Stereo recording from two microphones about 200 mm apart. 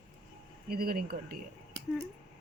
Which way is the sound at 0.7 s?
50° right (ahead or behind).